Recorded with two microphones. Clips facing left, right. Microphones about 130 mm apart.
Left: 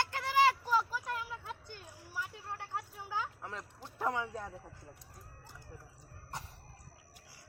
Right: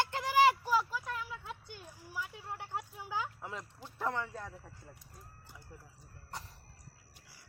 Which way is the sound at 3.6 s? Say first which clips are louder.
Left 2 dB; 5° left (ahead or behind).